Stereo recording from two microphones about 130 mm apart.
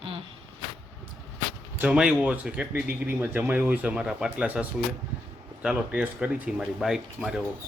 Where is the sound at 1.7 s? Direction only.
10° right (ahead or behind).